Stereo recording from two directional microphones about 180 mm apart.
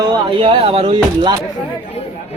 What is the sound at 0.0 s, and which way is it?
Speech, 30° right (ahead or behind).